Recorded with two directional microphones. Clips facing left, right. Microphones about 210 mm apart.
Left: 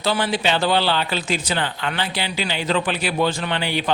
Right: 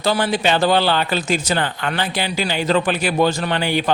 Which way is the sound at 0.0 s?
45° right (ahead or behind).